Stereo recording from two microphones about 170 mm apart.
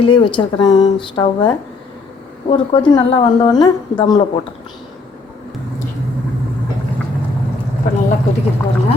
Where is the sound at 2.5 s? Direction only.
30° left (ahead or behind).